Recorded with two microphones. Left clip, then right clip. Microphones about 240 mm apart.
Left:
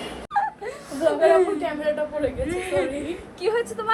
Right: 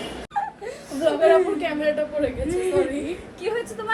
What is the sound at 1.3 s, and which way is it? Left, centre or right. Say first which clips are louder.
A woman's voice: even; centre.